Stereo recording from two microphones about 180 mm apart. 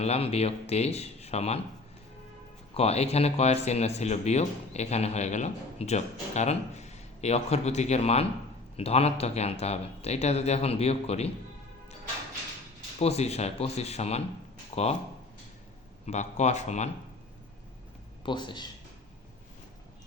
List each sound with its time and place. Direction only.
0.0 s speech: 35° left (ahead or behind)
2.7 s speech: 35° left (ahead or behind)
13.0 s speech: 35° left (ahead or behind)
16.0 s speech: 40° left (ahead or behind)
18.3 s speech: 25° left (ahead or behind)